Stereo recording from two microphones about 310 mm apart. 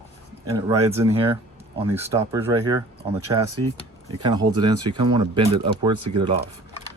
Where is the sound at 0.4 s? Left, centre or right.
Centre.